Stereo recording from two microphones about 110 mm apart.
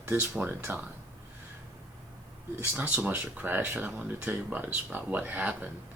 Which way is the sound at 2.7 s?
10° right (ahead or behind).